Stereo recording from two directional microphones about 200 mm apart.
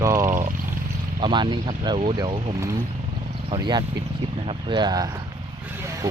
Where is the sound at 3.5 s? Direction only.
20° right (ahead or behind).